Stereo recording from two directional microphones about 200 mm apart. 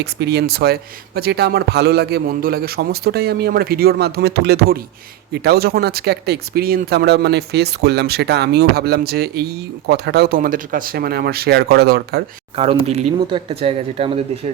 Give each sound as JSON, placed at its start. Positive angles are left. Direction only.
{"t": 0.0, "sound": "speech", "side_deg": -55}
{"t": 12.5, "sound": "speech", "side_deg": -30}